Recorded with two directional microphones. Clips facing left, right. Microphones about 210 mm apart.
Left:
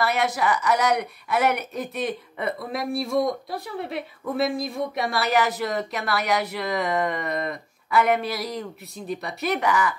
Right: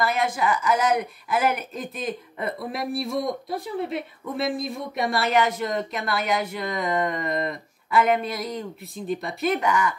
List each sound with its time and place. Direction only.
0.4 s speech: centre (ahead or behind)